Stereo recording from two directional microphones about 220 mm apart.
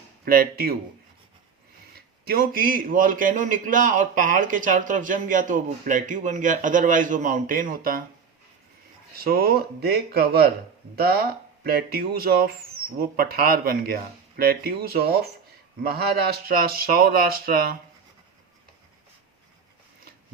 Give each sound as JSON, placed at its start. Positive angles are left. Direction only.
{"t": 0.3, "sound": "a man's voice", "side_deg": -40}
{"t": 2.0, "sound": "a man's voice", "side_deg": -45}
{"t": 9.1, "sound": "a man's voice", "side_deg": -45}